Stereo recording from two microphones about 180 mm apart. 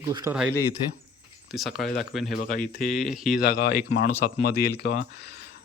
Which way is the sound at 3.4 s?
60° left (ahead or behind).